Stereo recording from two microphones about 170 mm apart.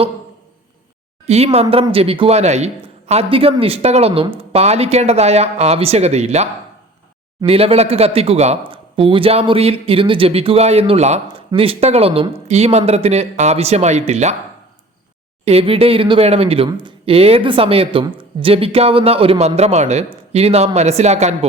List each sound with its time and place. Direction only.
1.3 s a man's voice: 35° right (ahead or behind)
15.4 s a man's voice: 35° right (ahead or behind)